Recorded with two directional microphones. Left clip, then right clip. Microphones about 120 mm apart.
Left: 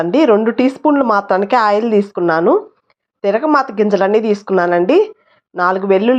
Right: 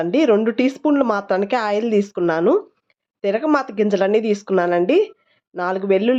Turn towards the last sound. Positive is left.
turn(degrees=-25)  # may be behind; listen again after turning